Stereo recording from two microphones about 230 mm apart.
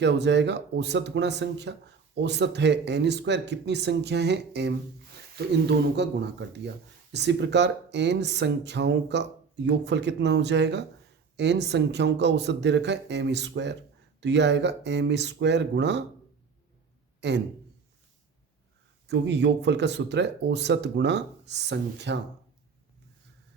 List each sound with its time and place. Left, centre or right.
0.0 s speech: right
7.1 s speech: right
17.2 s a man's voice: right
19.0 s speech: right